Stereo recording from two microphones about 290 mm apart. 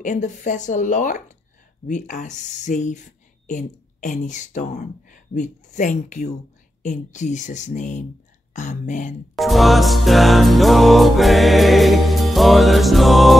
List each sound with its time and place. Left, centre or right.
0.0 s speech: left
9.3 s music: centre